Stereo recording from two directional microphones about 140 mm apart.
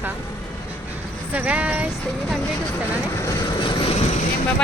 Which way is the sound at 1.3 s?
10° right (ahead or behind).